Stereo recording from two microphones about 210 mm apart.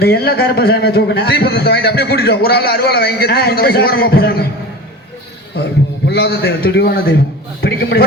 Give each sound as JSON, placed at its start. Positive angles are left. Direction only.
{"t": 0.0, "sound": "a man's voice", "side_deg": 50}
{"t": 6.1, "sound": "a man's voice", "side_deg": 50}